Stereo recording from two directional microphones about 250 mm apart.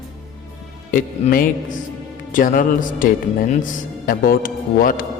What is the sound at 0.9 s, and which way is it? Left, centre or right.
Speech, left.